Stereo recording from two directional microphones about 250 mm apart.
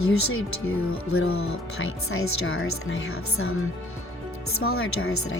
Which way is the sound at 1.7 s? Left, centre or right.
Left.